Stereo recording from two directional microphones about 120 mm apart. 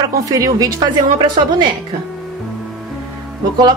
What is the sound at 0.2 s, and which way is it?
A woman's voice, 30° right (ahead or behind).